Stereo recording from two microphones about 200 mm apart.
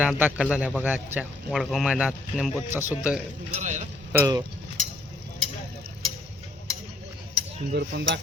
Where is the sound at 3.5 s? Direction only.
35° right (ahead or behind).